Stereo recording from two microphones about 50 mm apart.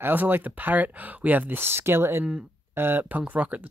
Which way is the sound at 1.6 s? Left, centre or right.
Right.